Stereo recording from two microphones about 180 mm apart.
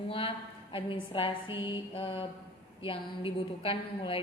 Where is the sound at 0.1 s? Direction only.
30° left (ahead or behind).